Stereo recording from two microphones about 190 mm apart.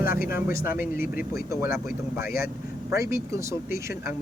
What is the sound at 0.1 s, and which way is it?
Speech, 50° left (ahead or behind).